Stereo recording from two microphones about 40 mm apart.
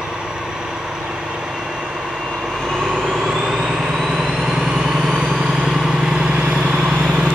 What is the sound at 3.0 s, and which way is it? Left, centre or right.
Vehicle, centre.